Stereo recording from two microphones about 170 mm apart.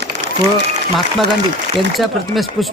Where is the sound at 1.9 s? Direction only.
Centre (ahead or behind).